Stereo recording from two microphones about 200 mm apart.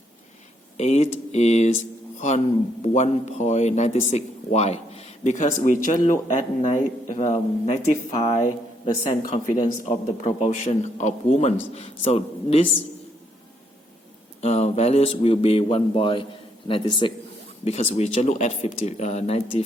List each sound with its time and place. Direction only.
0.8 s a man's voice: 35° left (ahead or behind)
14.4 s a man's voice: 30° left (ahead or behind)
17.7 s speech: 35° left (ahead or behind)